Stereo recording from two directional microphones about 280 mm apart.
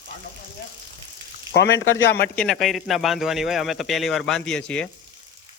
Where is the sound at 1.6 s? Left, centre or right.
Left.